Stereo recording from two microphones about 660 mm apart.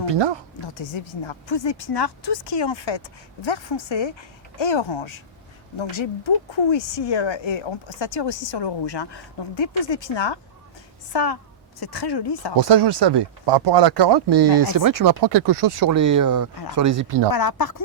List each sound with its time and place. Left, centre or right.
0.6 s a woman's voice: left
12.5 s speech: right
17.3 s speech: left